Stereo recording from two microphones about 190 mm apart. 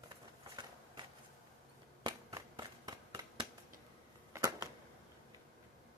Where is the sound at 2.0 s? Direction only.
20° right (ahead or behind).